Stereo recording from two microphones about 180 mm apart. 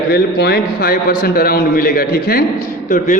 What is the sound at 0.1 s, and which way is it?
A man's voice, 65° left (ahead or behind).